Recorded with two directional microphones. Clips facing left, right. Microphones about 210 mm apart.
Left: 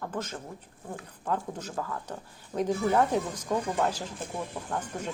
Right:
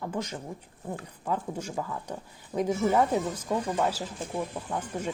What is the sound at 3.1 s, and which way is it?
Speech, 10° right (ahead or behind).